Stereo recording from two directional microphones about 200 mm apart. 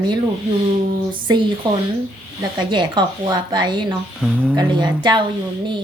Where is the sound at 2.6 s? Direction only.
20° right (ahead or behind).